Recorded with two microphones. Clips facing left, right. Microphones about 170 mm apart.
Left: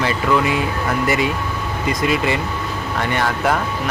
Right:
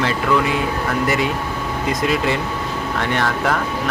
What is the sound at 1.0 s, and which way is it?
Speech, centre (ahead or behind).